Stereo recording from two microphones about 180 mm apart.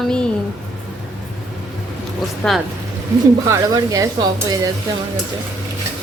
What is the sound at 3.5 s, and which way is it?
Speech, 20° right (ahead or behind).